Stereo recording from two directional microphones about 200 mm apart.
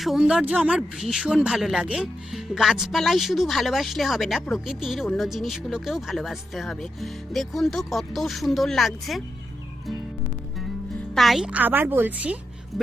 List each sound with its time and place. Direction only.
0.0 s speech: centre (ahead or behind)
11.1 s speech: centre (ahead or behind)